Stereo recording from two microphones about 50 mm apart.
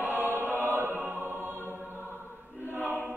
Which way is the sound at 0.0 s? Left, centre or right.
Right.